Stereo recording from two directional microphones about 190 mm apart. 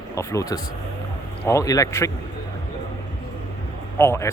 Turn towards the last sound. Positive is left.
turn(degrees=15)  # may be behind; listen again after turning